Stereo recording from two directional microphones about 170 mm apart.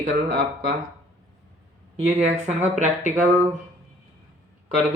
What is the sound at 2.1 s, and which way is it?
Speech, 40° right (ahead or behind).